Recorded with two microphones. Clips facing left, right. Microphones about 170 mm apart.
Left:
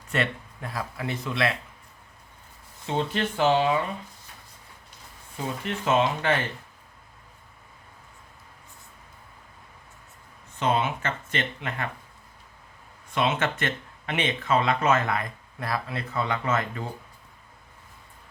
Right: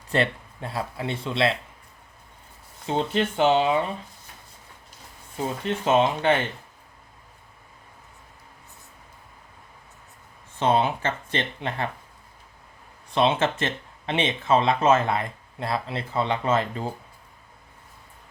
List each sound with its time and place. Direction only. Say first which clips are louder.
0.1 s speech: right 4 dB; 30° right (ahead or behind)
2.8 s speech: right 3 dB; 30° right (ahead or behind)
5.6 s speech: right 3 dB; 30° right (ahead or behind)
10.6 s speech: right 3 dB; 30° right (ahead or behind)
13.1 s speech: right 4 dB; 30° right (ahead or behind)